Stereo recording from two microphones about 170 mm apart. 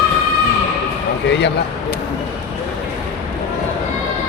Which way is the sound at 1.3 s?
90° left.